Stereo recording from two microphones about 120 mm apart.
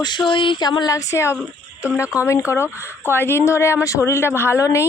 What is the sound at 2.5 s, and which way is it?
A woman's voice, 25° left (ahead or behind).